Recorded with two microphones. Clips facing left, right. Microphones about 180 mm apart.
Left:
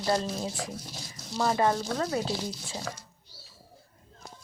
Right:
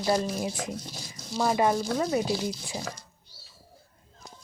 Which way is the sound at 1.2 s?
Centre (ahead or behind).